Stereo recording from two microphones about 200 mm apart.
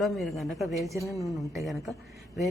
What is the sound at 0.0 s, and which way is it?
Speech, centre (ahead or behind).